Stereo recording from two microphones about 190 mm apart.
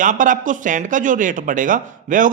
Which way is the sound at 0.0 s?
45° right (ahead or behind).